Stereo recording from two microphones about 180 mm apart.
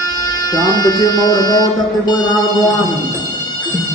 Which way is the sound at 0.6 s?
20° left (ahead or behind).